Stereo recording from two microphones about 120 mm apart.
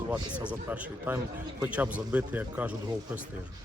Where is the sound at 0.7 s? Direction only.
15° right (ahead or behind).